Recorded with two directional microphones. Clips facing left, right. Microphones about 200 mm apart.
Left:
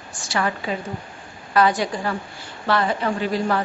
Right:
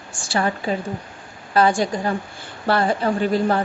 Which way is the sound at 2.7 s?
35° right (ahead or behind).